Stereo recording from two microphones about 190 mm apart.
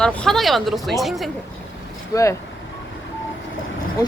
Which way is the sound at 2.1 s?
15° left (ahead or behind).